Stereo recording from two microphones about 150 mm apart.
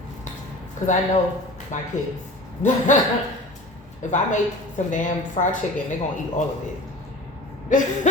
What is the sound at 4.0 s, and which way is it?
A woman's voice, 55° left (ahead or behind).